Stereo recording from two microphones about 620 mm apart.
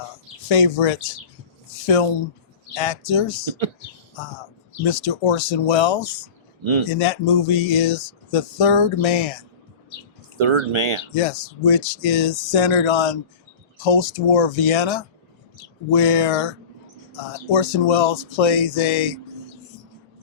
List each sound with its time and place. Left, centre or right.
0.8 s speech: left
2.7 s speech: left
4.9 s speech: left
6.8 s speech: left
10.3 s speech: right
11.2 s speech: left
12.9 s speech: left
13.7 s speech: left